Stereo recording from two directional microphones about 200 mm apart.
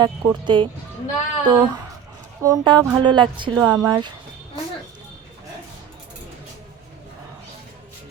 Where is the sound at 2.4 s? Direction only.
20° right (ahead or behind).